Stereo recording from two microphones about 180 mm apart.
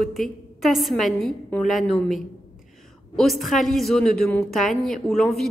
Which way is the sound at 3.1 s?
Centre (ahead or behind).